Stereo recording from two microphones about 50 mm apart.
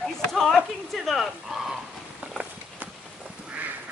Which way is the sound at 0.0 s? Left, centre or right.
Centre.